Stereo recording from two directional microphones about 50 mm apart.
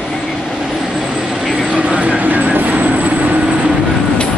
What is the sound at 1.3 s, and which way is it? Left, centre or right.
Vehicle, centre.